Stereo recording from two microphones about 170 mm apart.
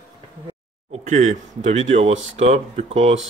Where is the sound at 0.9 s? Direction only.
45° right (ahead or behind).